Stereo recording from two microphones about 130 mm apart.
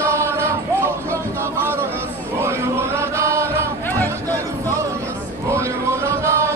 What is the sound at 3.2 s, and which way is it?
Music, 20° right (ahead or behind).